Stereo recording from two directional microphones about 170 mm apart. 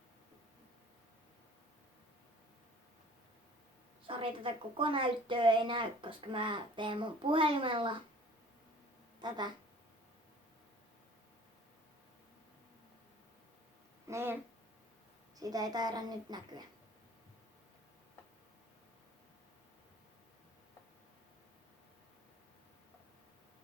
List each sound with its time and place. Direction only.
4.0 s a woman's voice: 30° right (ahead or behind)
9.2 s a woman's voice: 25° right (ahead or behind)
14.1 s speech: 15° right (ahead or behind)
15.4 s a woman's voice: 20° right (ahead or behind)